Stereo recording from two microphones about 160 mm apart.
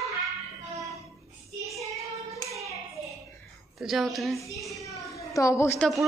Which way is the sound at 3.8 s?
Centre (ahead or behind).